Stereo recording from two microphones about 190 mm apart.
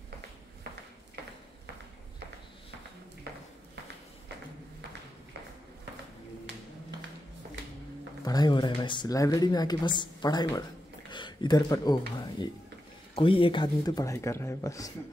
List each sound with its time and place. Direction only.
8.2 s speech: 20° left (ahead or behind)